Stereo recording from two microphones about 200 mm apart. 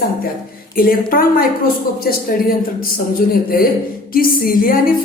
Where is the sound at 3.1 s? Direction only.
45° left (ahead or behind).